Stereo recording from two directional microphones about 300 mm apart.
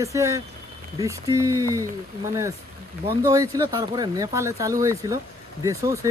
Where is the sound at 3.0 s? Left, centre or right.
Centre.